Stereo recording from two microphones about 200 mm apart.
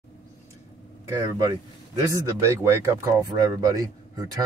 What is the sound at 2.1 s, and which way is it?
Speech, 15° right (ahead or behind).